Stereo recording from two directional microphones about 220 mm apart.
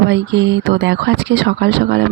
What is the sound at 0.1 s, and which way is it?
Speech, 55° right (ahead or behind).